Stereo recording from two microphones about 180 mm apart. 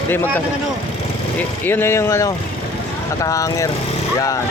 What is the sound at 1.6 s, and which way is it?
Speech, 10° left (ahead or behind).